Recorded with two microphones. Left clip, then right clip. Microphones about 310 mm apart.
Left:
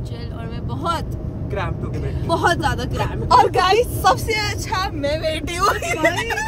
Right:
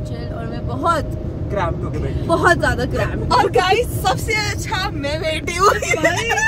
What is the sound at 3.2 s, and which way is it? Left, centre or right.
Speech, left.